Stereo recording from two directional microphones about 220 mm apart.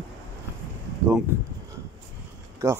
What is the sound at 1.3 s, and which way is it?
Speech, 10° right (ahead or behind).